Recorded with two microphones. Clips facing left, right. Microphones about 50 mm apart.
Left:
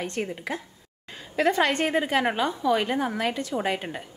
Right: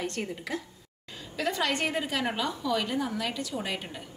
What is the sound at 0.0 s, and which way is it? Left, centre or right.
Speech, left.